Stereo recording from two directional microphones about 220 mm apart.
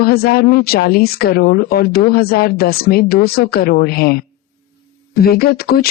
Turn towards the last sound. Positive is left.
turn(degrees=45)  # may be behind; listen again after turning